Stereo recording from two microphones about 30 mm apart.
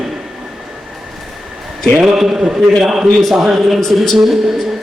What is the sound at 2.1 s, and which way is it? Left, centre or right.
A man's voice, centre.